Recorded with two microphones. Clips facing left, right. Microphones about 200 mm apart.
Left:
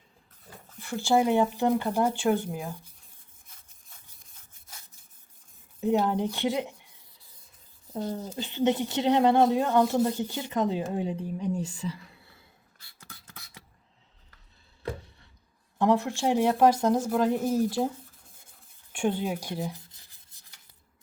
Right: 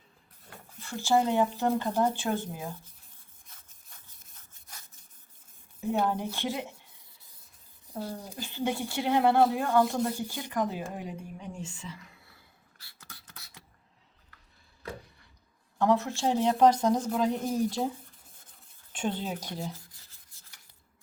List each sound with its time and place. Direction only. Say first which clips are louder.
0.8 s speech: left 2 dB; 15° left (ahead or behind)
5.9 s speech: left 4 dB; 20° left (ahead or behind)
7.9 s speech: left 5 dB; 10° right (ahead or behind)
8.4 s speech: left 6 dB; 20° left (ahead or behind)
15.8 s speech: left 2 dB; 15° left (ahead or behind)
18.9 s rub: left 4 dB; 10° left (ahead or behind)